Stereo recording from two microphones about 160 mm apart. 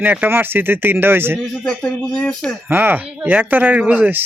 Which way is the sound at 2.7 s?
10° right (ahead or behind).